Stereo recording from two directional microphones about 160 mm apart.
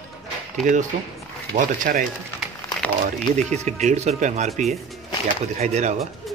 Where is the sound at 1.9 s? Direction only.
60° right (ahead or behind).